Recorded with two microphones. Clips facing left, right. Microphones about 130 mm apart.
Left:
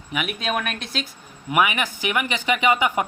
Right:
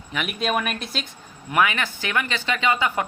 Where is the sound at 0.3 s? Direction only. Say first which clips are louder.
Right 4 dB; centre (ahead or behind).